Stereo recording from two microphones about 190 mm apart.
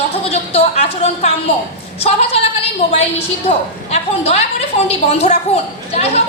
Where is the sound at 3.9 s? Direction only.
35° left (ahead or behind).